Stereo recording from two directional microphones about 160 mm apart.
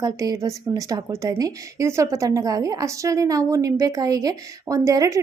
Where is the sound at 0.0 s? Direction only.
20° right (ahead or behind).